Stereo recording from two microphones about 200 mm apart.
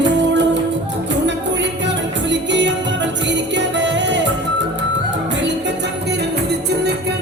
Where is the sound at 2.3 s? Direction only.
65° right (ahead or behind).